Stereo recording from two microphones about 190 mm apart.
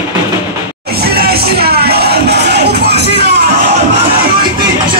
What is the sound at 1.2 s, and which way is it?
Music, 55° right (ahead or behind).